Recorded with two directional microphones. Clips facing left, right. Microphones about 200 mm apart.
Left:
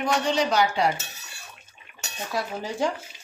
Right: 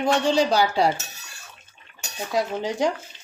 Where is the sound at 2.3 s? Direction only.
20° right (ahead or behind).